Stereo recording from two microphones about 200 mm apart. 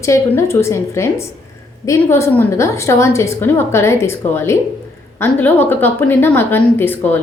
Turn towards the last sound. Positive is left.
turn(degrees=10)  # may be behind; listen again after turning